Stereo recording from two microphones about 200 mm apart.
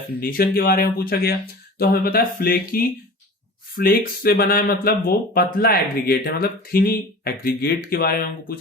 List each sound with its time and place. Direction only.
0.2 s speech: 50° left (ahead or behind)